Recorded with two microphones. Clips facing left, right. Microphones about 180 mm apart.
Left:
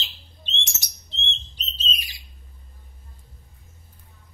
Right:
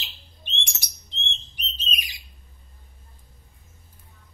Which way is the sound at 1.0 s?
15° right (ahead or behind).